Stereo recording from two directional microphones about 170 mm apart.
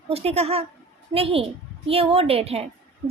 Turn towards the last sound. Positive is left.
turn(degrees=-35)  # may be behind; listen again after turning